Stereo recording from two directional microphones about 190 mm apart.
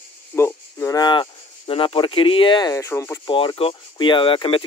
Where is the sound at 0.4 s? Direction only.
15° left (ahead or behind).